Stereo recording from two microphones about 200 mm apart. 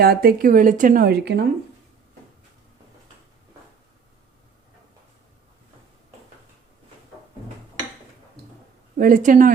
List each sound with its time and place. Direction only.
0.0 s speech: 50° right (ahead or behind)
9.0 s speech: 45° right (ahead or behind)